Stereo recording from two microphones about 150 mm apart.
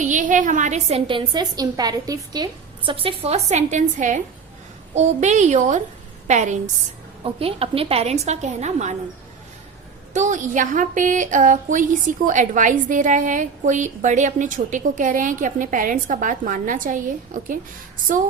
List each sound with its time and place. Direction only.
0.0 s a woman's voice: 55° right (ahead or behind)
7.3 s a woman's voice: 40° right (ahead or behind)
10.2 s speech: 55° right (ahead or behind)